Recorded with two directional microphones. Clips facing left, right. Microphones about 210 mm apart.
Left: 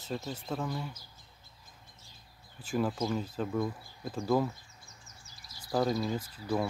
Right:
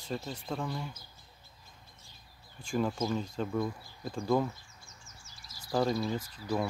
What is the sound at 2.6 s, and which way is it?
Speech, 5° left (ahead or behind).